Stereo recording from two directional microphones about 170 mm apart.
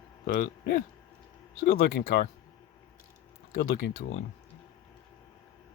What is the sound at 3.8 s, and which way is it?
Speech, 90° left.